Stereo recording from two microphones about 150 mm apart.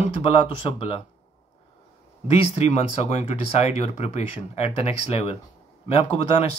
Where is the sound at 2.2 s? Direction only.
45° left (ahead or behind).